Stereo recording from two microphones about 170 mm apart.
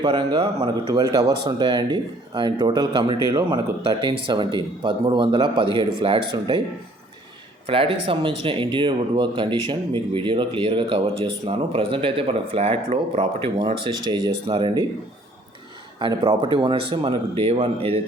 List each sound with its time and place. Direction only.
0.0 s a man's voice: 25° right (ahead or behind)
4.3 s a man's voice: 30° right (ahead or behind)
7.7 s speech: 30° right (ahead or behind)
16.0 s a man's voice: 30° right (ahead or behind)